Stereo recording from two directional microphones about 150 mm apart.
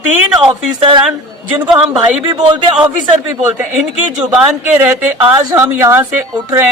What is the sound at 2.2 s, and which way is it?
Speech, 30° right (ahead or behind).